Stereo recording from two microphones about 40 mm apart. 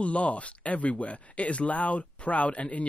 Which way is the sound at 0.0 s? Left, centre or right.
Left.